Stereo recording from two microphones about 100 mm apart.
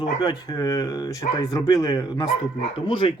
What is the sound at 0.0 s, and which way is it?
Speech, 40° left (ahead or behind).